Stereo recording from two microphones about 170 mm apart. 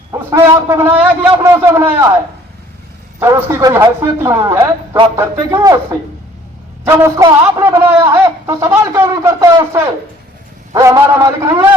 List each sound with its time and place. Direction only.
0.1 s a man's voice: 15° right (ahead or behind)
3.2 s a man's voice: 15° right (ahead or behind)
6.8 s a man's voice: 15° right (ahead or behind)